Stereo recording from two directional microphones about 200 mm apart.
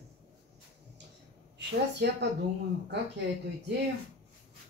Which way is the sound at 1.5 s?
60° right (ahead or behind).